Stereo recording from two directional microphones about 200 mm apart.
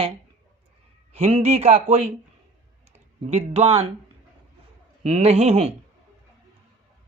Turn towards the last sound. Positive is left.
turn(degrees=-30)  # may be behind; listen again after turning